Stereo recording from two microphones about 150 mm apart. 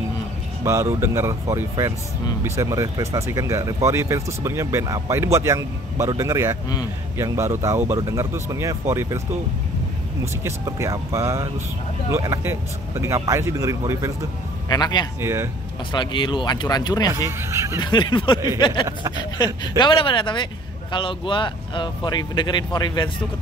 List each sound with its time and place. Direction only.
0.7 s speech: 20° right (ahead or behind)
10.2 s speech: 20° right (ahead or behind)
14.7 s speech: 25° left (ahead or behind)
15.1 s speech: 15° right (ahead or behind)
15.9 s speech: 30° left (ahead or behind)
17.1 s speech: 20° right (ahead or behind)
17.7 s speech: 30° left (ahead or behind)
18.7 s speech: 20° right (ahead or behind)
19.3 s speech: 30° left (ahead or behind)